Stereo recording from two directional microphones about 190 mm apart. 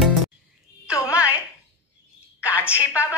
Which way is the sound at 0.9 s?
15° left (ahead or behind).